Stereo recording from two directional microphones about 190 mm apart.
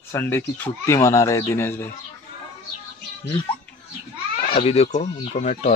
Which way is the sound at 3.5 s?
25° left (ahead or behind).